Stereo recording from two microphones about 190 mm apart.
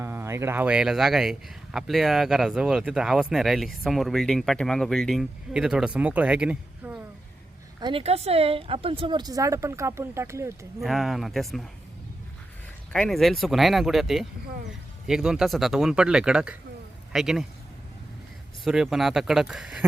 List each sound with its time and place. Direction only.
0.0 s a man's voice: 15° right (ahead or behind)
7.8 s speech: 25° right (ahead or behind)
10.8 s a man's voice: centre (ahead or behind)
12.9 s a man's voice: 5° left (ahead or behind)
18.6 s a man's voice: centre (ahead or behind)